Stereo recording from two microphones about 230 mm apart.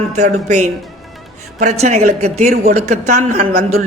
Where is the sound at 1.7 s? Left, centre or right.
Right.